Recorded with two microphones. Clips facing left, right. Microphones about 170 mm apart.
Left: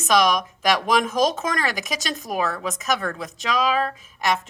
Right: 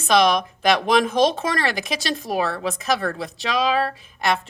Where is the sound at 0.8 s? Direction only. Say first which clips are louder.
Right 3 dB; 30° right (ahead or behind).